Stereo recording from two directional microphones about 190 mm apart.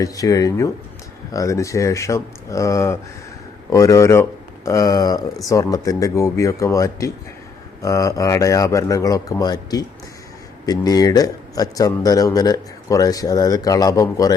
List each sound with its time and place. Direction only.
0.0 s a man's voice: 20° left (ahead or behind)